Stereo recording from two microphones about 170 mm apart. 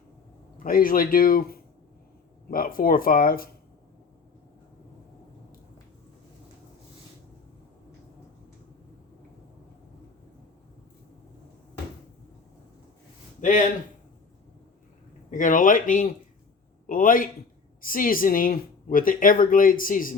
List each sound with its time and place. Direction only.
0.6 s speech: 55° left (ahead or behind)
13.4 s speech: 45° left (ahead or behind)
15.3 s a man's voice: 50° left (ahead or behind)